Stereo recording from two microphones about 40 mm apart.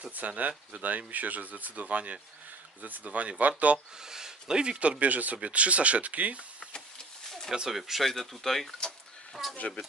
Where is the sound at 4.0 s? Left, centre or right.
Centre; by 6.7 s right.